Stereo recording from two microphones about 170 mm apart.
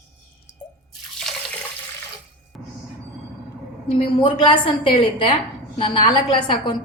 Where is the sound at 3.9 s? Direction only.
30° left (ahead or behind).